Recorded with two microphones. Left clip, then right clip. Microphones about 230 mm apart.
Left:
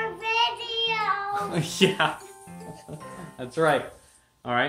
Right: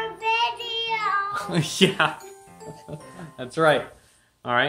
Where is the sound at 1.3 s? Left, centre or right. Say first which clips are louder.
Right 1 dB; right.